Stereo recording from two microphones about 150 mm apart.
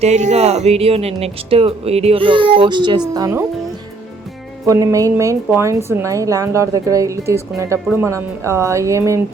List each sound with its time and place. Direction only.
0.0 s a woman's voice: 50° right (ahead or behind); by 3.4 s 20° right (ahead or behind)
4.6 s a woman's voice: 20° right (ahead or behind)